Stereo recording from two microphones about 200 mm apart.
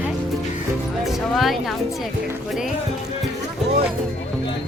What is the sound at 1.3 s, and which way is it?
Speech, centre (ahead or behind).